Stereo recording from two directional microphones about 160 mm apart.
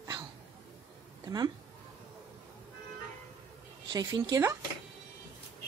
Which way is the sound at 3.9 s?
25° right (ahead or behind).